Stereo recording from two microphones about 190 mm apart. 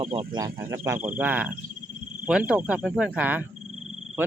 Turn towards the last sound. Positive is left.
turn(degrees=-10)  # may be behind; listen again after turning